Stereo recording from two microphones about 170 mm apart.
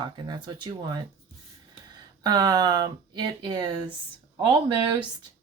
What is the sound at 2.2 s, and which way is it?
Speech, 25° right (ahead or behind).